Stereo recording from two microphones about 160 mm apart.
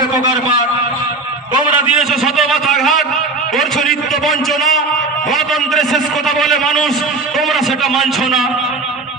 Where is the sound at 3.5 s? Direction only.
Centre (ahead or behind).